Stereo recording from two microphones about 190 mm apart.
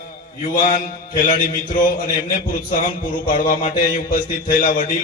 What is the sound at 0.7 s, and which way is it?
A man's voice, 45° left (ahead or behind).